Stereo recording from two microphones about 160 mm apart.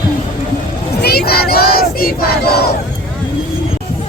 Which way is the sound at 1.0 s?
75° left (ahead or behind).